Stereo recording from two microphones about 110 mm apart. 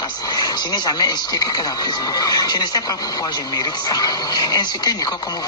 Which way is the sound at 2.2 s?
35° left (ahead or behind).